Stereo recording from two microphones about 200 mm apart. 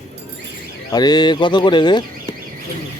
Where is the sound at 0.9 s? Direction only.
20° left (ahead or behind).